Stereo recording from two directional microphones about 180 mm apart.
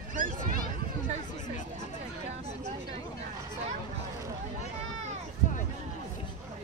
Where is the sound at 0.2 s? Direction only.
50° right (ahead or behind).